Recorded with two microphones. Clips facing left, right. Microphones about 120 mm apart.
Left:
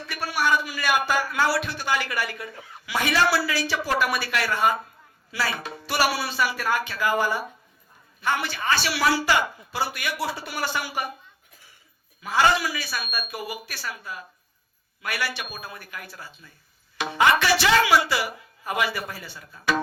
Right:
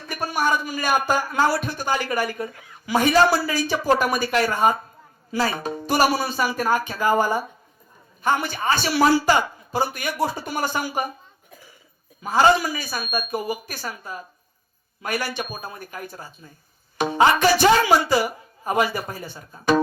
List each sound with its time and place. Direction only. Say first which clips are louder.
0.0 s a man's voice: right 2 dB; 45° right (ahead or behind)
12.2 s speech: right 4 dB; 45° right (ahead or behind)